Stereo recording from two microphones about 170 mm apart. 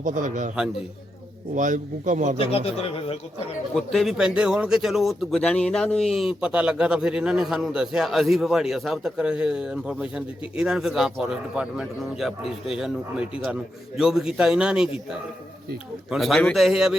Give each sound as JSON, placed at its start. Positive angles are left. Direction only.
{"t": 0.0, "sound": "a man's voice", "side_deg": -50}
{"t": 1.5, "sound": "a man's voice", "side_deg": -50}
{"t": 3.8, "sound": "speech", "side_deg": 0}